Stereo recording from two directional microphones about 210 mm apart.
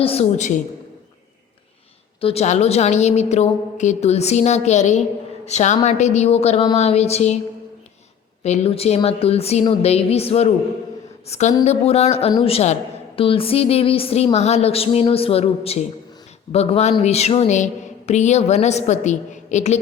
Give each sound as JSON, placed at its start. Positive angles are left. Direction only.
{"t": 0.0, "sound": "speech", "side_deg": 30}
{"t": 2.2, "sound": "speech", "side_deg": 30}
{"t": 8.4, "sound": "music", "side_deg": 30}
{"t": 11.3, "sound": "speech", "side_deg": 35}
{"t": 11.6, "sound": "music", "side_deg": 30}
{"t": 16.5, "sound": "speech", "side_deg": 30}